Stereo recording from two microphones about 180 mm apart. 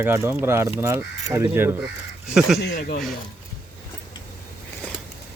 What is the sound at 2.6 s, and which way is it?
Speech, 60° left (ahead or behind).